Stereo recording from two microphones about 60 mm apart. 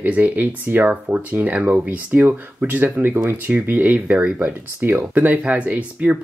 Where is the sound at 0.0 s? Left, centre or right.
Right.